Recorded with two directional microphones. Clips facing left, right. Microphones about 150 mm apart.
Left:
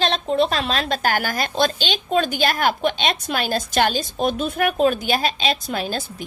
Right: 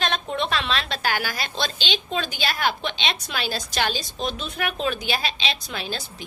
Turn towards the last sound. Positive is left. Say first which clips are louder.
# left 6 dB
turn(degrees=45)  # may be behind; listen again after turning